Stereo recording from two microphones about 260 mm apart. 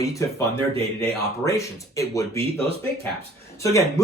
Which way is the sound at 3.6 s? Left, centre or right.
Centre.